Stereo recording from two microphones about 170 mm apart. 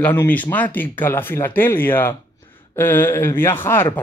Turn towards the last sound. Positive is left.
turn(degrees=15)  # may be behind; listen again after turning